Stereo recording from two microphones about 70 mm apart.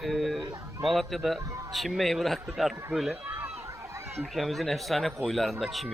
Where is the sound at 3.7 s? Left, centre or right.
Right.